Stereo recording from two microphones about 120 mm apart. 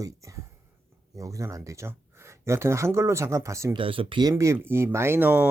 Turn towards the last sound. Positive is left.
turn(degrees=-15)  # may be behind; listen again after turning